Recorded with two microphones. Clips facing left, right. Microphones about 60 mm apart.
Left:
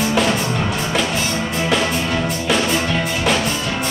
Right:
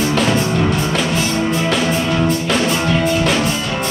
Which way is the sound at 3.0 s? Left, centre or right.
Centre.